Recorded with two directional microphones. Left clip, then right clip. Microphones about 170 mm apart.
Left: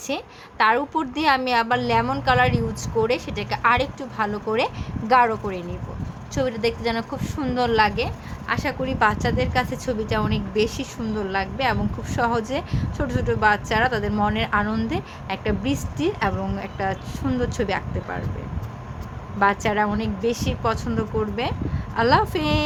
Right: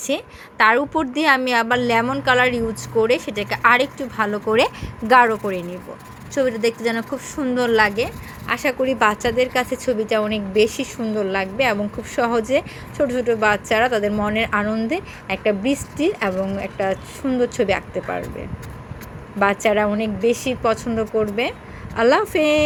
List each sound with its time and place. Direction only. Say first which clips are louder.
0.1 s a woman's voice: right 4 dB; 15° right (ahead or behind)
19.4 s a woman's voice: right 3 dB; 15° right (ahead or behind)